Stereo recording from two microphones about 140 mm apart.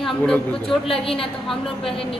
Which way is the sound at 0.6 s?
40° left (ahead or behind).